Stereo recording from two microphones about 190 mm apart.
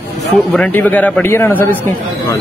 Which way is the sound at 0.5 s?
5° left (ahead or behind).